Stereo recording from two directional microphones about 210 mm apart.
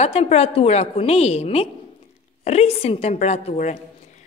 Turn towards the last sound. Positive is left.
turn(degrees=35)  # may be behind; listen again after turning